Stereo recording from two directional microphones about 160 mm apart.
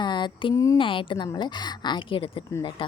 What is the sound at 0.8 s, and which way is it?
A woman's voice, 30° left (ahead or behind).